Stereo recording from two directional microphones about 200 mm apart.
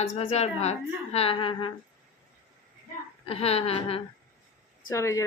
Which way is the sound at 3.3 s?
30° left (ahead or behind).